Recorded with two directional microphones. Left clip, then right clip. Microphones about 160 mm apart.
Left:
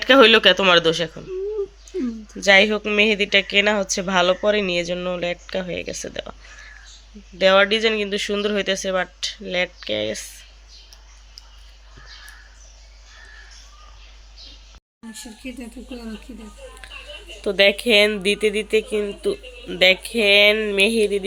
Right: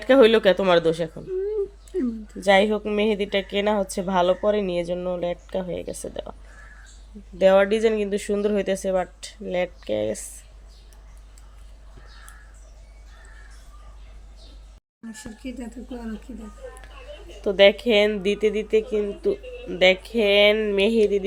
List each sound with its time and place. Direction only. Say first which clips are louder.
0.0 s speech: left 3 dB; 15° right (ahead or behind)
7.3 s speech: left 2 dB; 25° right (ahead or behind)
15.1 s speech: left 1 dB; 10° right (ahead or behind)
17.4 s speech: even; 10° right (ahead or behind)